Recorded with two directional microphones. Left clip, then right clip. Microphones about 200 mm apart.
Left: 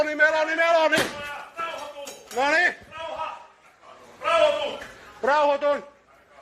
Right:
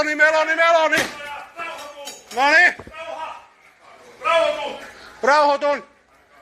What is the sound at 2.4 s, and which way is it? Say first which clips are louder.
Speech: right 7 dB; 5° right (ahead or behind).